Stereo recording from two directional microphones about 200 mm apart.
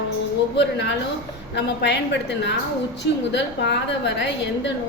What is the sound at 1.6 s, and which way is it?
A woman's voice, 60° left (ahead or behind).